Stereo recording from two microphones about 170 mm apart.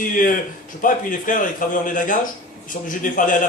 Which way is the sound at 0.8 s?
50° left (ahead or behind).